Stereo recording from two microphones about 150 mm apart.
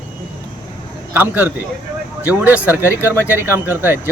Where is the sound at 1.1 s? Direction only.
10° right (ahead or behind).